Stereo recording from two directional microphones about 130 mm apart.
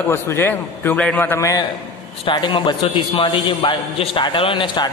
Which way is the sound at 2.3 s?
35° left (ahead or behind).